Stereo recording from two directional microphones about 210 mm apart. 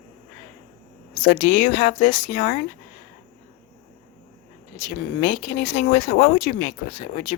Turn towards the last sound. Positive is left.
turn(degrees=35)  # may be behind; listen again after turning